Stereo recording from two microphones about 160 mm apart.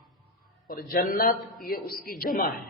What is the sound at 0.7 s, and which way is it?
A man's voice, 65° left (ahead or behind).